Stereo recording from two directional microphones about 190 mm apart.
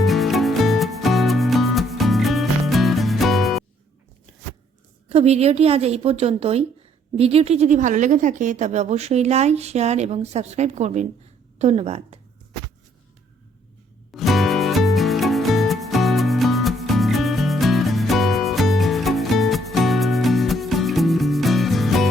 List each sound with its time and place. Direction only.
0.0 s music: centre (ahead or behind)
5.0 s a woman's voice: 35° right (ahead or behind)
14.1 s music: centre (ahead or behind)